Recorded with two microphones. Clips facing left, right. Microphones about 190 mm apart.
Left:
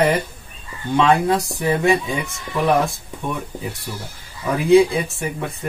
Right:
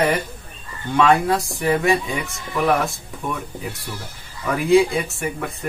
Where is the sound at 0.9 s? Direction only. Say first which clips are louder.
Left 1 dB; 20° left (ahead or behind).